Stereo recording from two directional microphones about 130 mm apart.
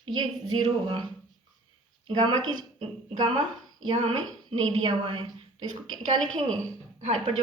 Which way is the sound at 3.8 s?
45° right (ahead or behind).